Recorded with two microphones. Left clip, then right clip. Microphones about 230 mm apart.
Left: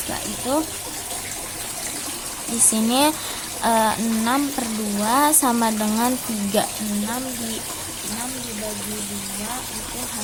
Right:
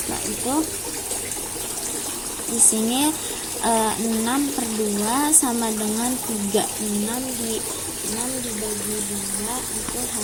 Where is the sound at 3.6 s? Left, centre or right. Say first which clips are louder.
Left 2 dB; left.